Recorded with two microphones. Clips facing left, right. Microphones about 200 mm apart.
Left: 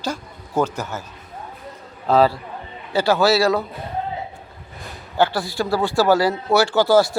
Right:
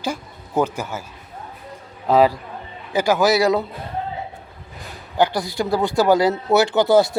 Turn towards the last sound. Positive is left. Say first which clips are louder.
# even
turn(degrees=-20)  # may be behind; listen again after turning